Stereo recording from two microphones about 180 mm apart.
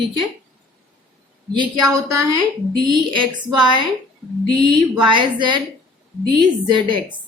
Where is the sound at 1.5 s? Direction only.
20° right (ahead or behind).